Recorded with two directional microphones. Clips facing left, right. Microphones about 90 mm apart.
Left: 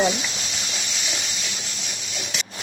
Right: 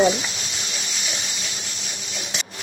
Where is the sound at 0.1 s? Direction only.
35° right (ahead or behind).